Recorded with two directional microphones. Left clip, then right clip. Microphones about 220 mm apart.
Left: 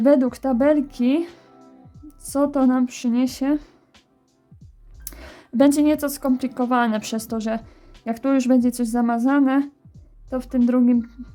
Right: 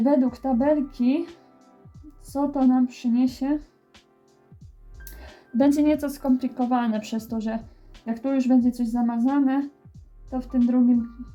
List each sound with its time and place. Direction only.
0.0 s speech: 35° left (ahead or behind)
2.2 s speech: 35° left (ahead or behind)
5.0 s speech: 30° left (ahead or behind)
9.6 s music: centre (ahead or behind)
10.3 s speech: 35° left (ahead or behind)